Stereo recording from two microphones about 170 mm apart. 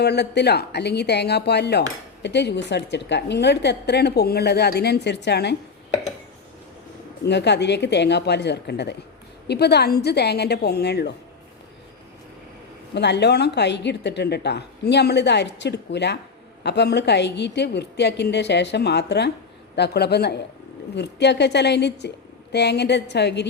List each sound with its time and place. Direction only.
0.0 s a woman's voice: 80° left
7.3 s a woman's voice: 90° left
12.9 s a woman's voice: 85° left
20.9 s a woman's voice: 85° left